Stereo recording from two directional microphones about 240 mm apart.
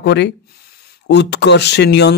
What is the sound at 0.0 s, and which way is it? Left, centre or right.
Speech, left.